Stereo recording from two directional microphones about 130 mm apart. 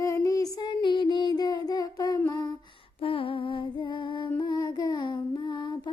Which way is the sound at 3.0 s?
45° left (ahead or behind).